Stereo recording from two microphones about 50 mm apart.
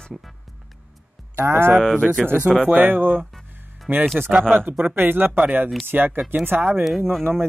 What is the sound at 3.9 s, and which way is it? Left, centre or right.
Speech, right.